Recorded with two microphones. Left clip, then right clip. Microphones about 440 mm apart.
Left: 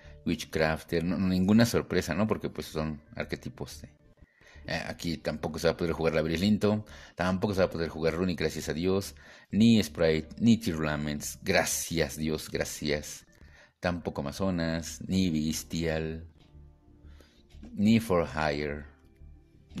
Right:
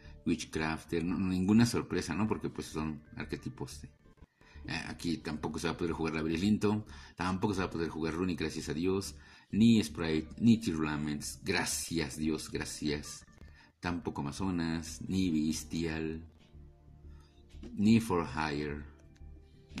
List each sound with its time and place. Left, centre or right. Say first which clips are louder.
0.2 s speech: left 6 dB; centre
4.6 s speech: left 4 dB; centre
17.8 s speech: left 4 dB; centre